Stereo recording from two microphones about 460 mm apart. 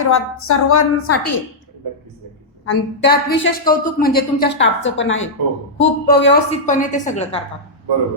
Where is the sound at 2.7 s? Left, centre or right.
Left.